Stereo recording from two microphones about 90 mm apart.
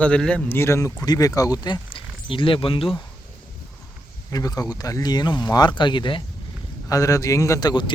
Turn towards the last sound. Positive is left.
turn(degrees=50)  # may be behind; listen again after turning